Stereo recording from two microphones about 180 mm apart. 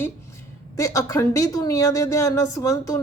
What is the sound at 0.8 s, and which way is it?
Speech, 20° left (ahead or behind).